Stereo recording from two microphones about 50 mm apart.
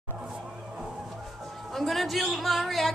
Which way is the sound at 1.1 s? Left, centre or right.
Centre.